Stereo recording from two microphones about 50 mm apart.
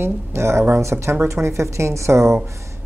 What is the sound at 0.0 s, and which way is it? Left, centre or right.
Speech, right.